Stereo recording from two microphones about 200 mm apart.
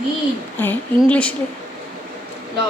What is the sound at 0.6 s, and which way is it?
Speech, 5° left (ahead or behind).